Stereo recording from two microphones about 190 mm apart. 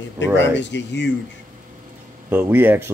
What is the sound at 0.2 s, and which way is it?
Speech, 70° left (ahead or behind).